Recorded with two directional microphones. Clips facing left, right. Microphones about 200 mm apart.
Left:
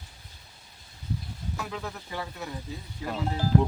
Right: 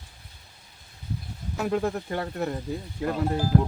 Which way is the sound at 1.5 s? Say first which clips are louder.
Right 12 dB; 50° right (ahead or behind).